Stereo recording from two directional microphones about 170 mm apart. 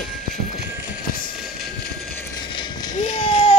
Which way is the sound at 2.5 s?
25° left (ahead or behind).